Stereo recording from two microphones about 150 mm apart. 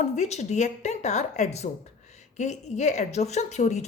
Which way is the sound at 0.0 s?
50° left (ahead or behind).